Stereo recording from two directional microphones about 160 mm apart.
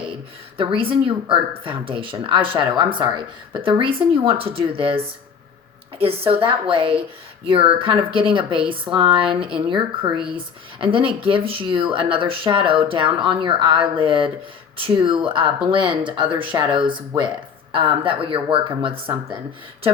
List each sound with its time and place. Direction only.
0.5 s speech: 35° right (ahead or behind)